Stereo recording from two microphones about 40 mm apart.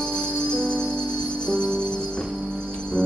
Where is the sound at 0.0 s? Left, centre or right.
Left.